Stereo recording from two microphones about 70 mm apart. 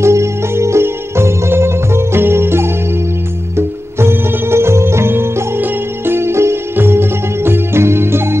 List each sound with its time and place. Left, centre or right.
0.0 s music: right